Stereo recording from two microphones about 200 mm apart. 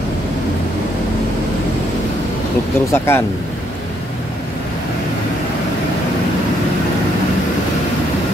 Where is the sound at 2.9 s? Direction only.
10° left (ahead or behind).